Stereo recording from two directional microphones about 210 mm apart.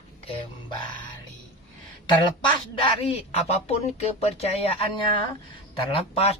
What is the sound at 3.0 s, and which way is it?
Speech, 30° left (ahead or behind).